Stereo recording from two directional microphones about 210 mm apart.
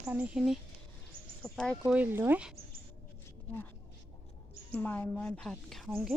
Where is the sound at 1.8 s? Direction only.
5° right (ahead or behind).